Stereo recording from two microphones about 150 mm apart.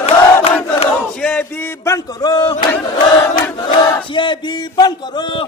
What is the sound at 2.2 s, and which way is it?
Crowd, 25° left (ahead or behind).